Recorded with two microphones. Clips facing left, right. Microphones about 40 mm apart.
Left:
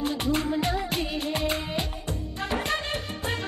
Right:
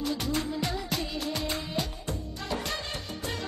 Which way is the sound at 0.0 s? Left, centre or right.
Left.